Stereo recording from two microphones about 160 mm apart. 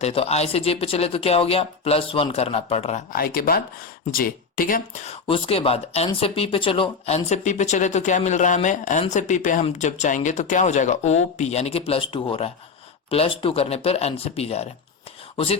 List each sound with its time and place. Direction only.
0.0 s speech: 40° left (ahead or behind)
3.2 s speech: 70° left (ahead or behind)
5.3 s speech: 35° left (ahead or behind)
7.3 s speech: 50° left (ahead or behind)